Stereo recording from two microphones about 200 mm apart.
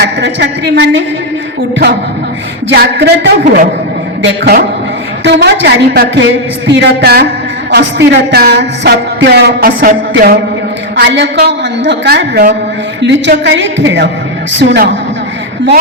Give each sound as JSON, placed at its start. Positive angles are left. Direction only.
{"t": 0.0, "sound": "a woman's voice", "side_deg": -60}
{"t": 2.6, "sound": "a woman's voice", "side_deg": -55}
{"t": 7.7, "sound": "music", "side_deg": -60}
{"t": 10.9, "sound": "a woman's voice", "side_deg": -60}